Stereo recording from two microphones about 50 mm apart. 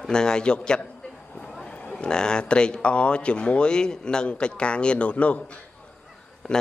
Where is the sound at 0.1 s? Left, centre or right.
Centre.